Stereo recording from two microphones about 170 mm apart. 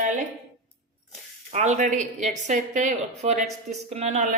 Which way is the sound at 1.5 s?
40° right (ahead or behind).